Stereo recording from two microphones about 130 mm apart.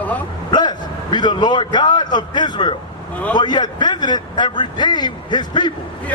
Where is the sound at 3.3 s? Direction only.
35° left (ahead or behind).